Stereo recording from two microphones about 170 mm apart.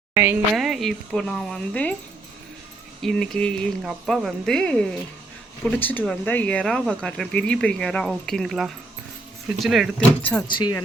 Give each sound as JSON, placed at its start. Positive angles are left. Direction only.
{"t": 0.1, "sound": "speech", "side_deg": -15}
{"t": 0.5, "sound": "speech", "side_deg": 0}
{"t": 3.0, "sound": "speech", "side_deg": 5}
{"t": 10.5, "sound": "speech", "side_deg": 25}